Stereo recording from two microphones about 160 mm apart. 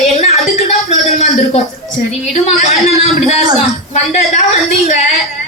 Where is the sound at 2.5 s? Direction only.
40° left (ahead or behind).